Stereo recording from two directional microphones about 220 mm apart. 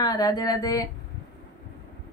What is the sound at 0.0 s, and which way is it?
Speech, 15° left (ahead or behind).